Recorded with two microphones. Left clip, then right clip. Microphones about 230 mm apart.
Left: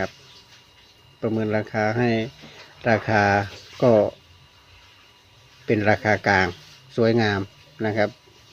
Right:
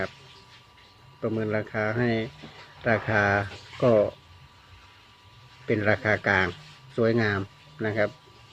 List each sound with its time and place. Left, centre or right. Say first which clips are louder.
1.2 s speech: left 4 dB; left
5.6 s speech: left 4 dB; left